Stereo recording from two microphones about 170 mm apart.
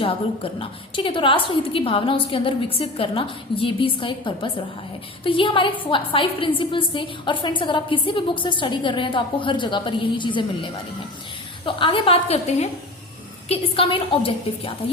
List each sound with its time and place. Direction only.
0.0 s a woman's voice: 35° left (ahead or behind)